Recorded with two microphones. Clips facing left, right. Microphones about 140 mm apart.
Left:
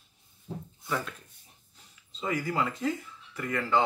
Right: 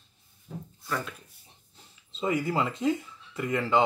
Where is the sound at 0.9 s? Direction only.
Centre (ahead or behind).